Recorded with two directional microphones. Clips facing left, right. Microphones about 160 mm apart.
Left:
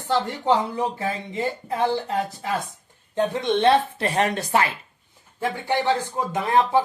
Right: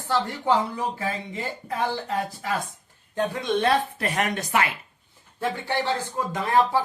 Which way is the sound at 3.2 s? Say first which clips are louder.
Left 3 dB; 25° left (ahead or behind).